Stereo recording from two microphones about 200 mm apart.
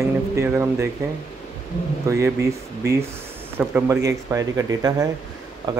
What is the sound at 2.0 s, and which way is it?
Speech, 15° right (ahead or behind).